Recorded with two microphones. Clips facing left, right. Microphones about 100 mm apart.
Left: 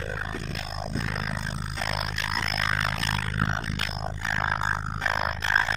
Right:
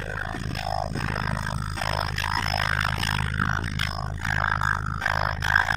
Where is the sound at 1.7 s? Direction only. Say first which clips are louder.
Right 2 dB; 30° right (ahead or behind).